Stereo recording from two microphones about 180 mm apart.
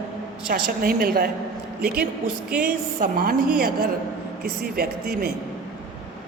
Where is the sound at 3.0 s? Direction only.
55° right (ahead or behind).